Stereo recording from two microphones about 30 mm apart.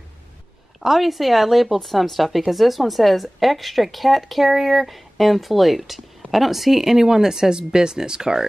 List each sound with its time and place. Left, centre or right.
0.8 s a woman's voice: centre; by 8.5 s right